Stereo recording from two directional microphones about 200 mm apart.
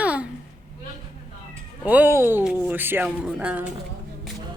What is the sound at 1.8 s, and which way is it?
Speech, 10° right (ahead or behind).